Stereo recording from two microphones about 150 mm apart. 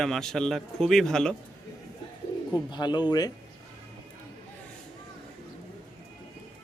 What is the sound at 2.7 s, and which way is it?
Speech, 30° left (ahead or behind).